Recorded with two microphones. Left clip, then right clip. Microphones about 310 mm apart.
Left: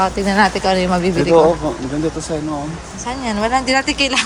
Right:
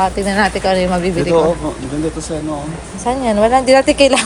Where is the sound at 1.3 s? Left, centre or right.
Left.